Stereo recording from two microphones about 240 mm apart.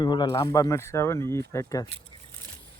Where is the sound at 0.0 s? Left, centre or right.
Centre.